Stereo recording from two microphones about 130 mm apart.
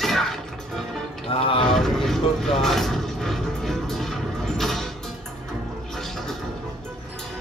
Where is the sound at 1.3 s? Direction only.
45° left (ahead or behind).